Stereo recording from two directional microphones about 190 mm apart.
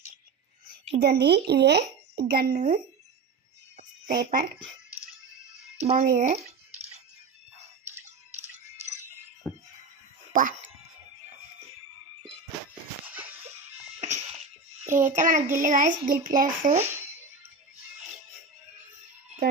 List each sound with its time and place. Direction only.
1.0 s speech: 60° right (ahead or behind)
4.1 s speech: 45° right (ahead or behind)
5.8 s speech: 35° right (ahead or behind)
6.1 s drip: 40° right (ahead or behind)
8.0 s music: 35° right (ahead or behind)
9.5 s music: 15° left (ahead or behind)
10.3 s speech: 45° right (ahead or behind)
13.1 s giggle: 10° right (ahead or behind)
14.0 s a sound: 35° right (ahead or behind)
14.9 s speech: 45° right (ahead or behind)
16.8 s speech: 10° right (ahead or behind)